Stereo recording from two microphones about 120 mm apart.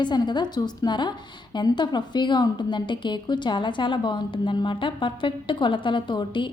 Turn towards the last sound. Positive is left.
turn(degrees=40)  # may be behind; listen again after turning